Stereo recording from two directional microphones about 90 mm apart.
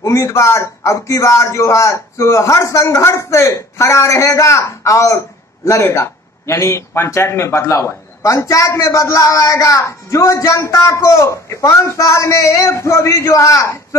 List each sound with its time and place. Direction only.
0.0 s speech: 35° left (ahead or behind)